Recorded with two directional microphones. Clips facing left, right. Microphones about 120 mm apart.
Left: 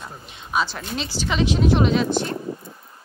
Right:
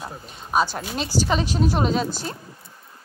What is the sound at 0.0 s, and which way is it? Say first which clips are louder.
A woman's voice: right 3 dB; 40° right (ahead or behind).